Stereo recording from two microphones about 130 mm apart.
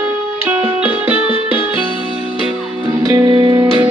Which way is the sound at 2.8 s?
30° right (ahead or behind).